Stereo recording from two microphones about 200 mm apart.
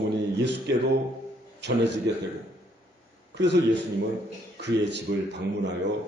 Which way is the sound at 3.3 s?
60° right (ahead or behind).